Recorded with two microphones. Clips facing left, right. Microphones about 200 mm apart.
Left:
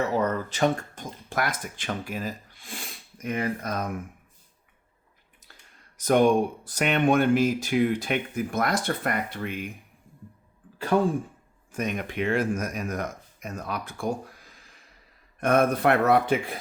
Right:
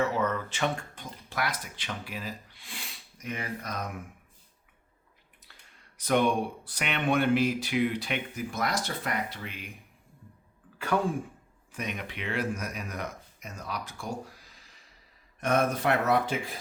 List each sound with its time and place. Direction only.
0.0 s speech: 40° left (ahead or behind)
6.0 s speech: 45° left (ahead or behind)
10.8 s speech: 35° left (ahead or behind)
11.7 s speech: 45° left (ahead or behind)